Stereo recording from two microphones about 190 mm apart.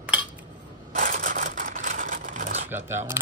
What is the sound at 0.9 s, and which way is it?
Camera, 40° right (ahead or behind).